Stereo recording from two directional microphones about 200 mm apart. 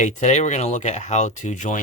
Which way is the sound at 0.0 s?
35° left (ahead or behind).